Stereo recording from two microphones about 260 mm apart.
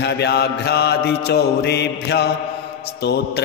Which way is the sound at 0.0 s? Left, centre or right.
Left.